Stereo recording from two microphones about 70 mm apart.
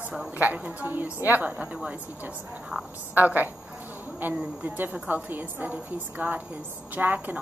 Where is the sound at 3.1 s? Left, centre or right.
Right.